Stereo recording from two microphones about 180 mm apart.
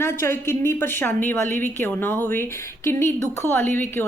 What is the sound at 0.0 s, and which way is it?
A woman's voice, 15° left (ahead or behind).